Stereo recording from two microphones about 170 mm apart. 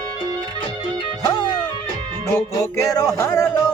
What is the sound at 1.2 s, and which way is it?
Music, 25° left (ahead or behind).